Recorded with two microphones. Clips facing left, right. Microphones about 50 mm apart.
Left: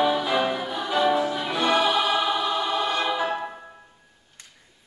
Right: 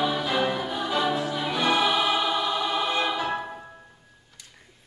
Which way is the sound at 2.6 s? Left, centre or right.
Centre.